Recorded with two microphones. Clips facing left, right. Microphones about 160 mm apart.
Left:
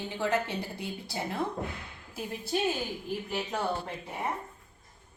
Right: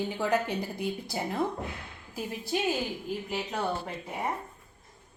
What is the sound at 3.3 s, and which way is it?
Speech, 10° right (ahead or behind).